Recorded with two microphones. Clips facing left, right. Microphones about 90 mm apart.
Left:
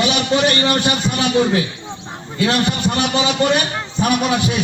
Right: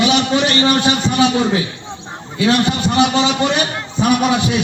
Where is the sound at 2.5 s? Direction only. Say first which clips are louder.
Right 4 dB; 15° right (ahead or behind).